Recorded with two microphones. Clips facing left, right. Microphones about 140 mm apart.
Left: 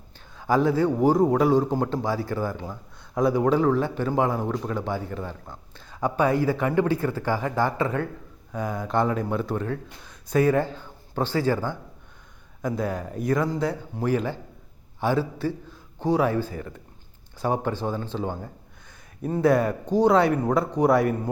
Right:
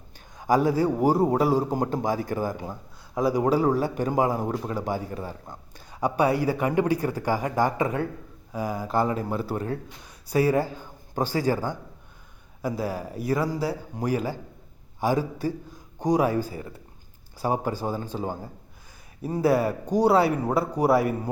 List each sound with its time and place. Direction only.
0.3 s a sound: 15° right (ahead or behind)
0.8 s speech: 10° right (ahead or behind)
3.2 s a man's voice: 5° right (ahead or behind)